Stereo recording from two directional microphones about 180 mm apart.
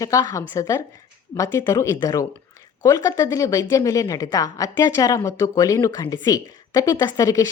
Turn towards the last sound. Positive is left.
turn(degrees=20)  # may be behind; listen again after turning